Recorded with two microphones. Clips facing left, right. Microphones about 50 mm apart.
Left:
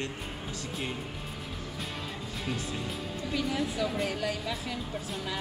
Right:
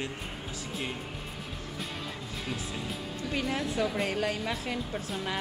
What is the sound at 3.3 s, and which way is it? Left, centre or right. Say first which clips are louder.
A woman's voice: even; right.